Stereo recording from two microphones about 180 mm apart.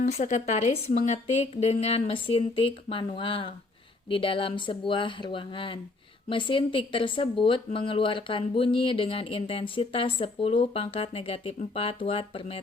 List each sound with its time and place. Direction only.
0.0 s speech: 40° left (ahead or behind)